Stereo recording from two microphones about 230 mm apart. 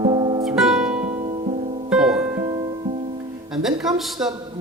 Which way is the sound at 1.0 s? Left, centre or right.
Right.